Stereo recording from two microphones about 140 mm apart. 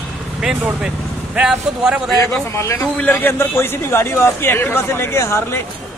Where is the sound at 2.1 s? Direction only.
20° left (ahead or behind).